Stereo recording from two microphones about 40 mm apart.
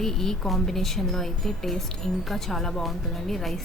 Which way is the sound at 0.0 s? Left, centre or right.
Centre.